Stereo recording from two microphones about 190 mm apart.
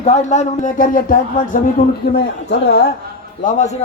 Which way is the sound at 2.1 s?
60° left (ahead or behind).